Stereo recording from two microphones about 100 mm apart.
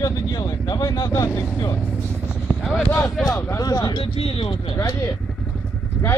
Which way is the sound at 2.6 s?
Centre (ahead or behind).